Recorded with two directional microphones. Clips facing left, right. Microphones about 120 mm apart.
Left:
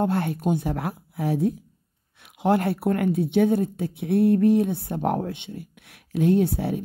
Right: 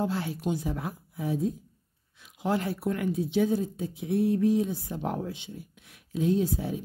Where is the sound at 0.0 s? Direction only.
60° left (ahead or behind).